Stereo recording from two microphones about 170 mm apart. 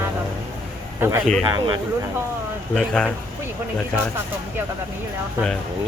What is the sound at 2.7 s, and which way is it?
Speech, 5° left (ahead or behind).